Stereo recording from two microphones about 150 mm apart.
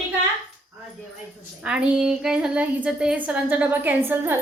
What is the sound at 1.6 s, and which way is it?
Speech, 5° right (ahead or behind).